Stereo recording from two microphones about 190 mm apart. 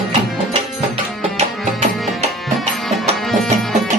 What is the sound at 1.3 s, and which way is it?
Music, 35° right (ahead or behind).